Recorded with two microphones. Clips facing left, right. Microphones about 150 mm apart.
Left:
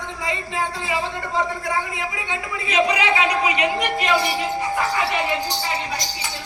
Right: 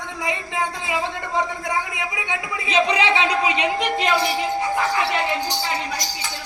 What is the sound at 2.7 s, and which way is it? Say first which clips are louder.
Speech: even; 25° right (ahead or behind).